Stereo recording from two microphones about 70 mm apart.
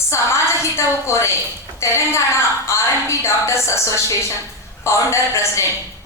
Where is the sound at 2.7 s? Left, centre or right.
Left.